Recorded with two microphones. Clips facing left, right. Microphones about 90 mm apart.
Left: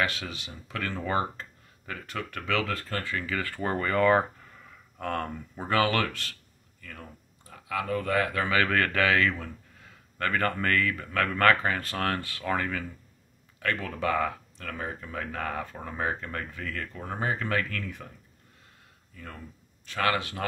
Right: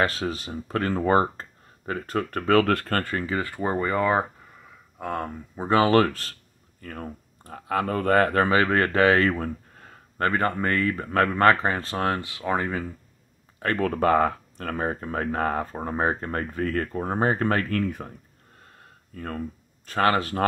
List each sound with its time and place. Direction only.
0.0 s speech: 40° right (ahead or behind)
2.7 s speech: 60° right (ahead or behind)
3.2 s speech: 25° right (ahead or behind)
5.7 s speech: 30° right (ahead or behind)
8.5 s speech: 30° right (ahead or behind); by 10.2 s 45° right (ahead or behind)
10.2 s speech: 25° right (ahead or behind); by 18.1 s 45° right (ahead or behind)
19.1 s speech: 50° right (ahead or behind)